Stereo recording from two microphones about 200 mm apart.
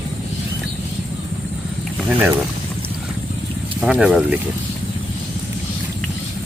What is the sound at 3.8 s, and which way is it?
Speech, 5° right (ahead or behind).